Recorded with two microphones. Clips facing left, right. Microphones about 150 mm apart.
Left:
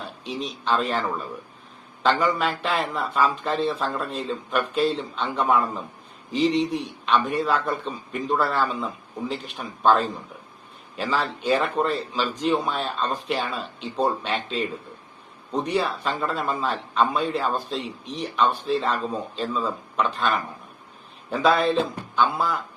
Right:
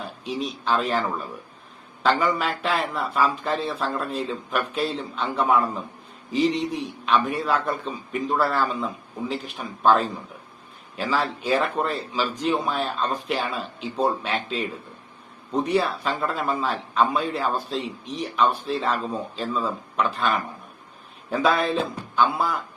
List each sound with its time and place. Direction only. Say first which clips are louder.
0.3 s speech: even; 5° right (ahead or behind)
2.0 s speech: even; 5° right (ahead or behind)
21.4 s speech: left 2 dB; centre (ahead or behind)